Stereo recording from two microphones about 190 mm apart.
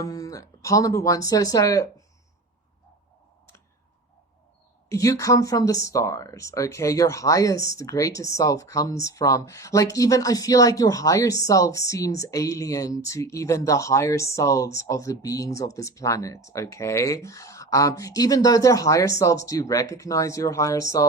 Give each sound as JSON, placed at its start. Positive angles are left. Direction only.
{"t": 0.0, "sound": "speech", "side_deg": 20}
{"t": 4.9, "sound": "a woman's voice", "side_deg": 15}